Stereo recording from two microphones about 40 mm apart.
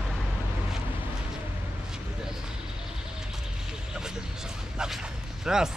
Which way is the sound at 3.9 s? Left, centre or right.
Centre.